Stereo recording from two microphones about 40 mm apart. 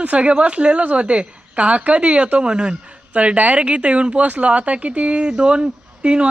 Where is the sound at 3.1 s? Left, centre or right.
Right.